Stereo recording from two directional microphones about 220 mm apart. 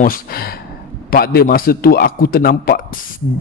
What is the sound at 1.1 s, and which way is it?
A man's voice, 40° left (ahead or behind).